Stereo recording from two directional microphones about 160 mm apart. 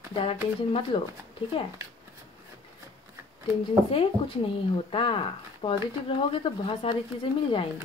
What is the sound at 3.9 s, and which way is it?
Speech, 35° left (ahead or behind).